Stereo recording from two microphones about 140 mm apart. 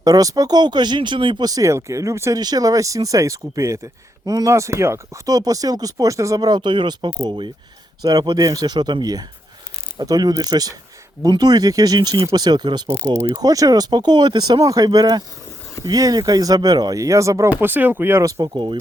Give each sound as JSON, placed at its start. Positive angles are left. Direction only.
{"t": 0.0, "sound": "speech", "side_deg": -25}
{"t": 13.0, "sound": "speech", "side_deg": -20}